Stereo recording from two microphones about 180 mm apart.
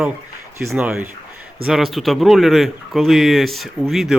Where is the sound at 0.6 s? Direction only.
10° right (ahead or behind).